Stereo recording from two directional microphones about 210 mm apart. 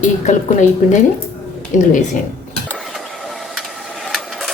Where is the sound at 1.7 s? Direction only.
35° left (ahead or behind).